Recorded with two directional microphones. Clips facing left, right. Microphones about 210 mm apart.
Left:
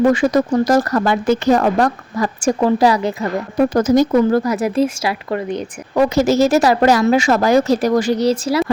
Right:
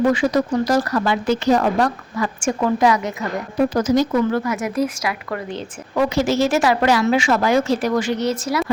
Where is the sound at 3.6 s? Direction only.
50° left (ahead or behind); by 5.6 s 20° left (ahead or behind).